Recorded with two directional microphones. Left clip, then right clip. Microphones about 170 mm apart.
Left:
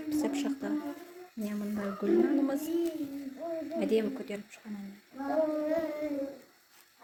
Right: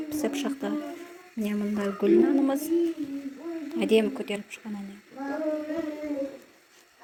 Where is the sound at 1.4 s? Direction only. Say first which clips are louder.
Right 7 dB; 20° right (ahead or behind).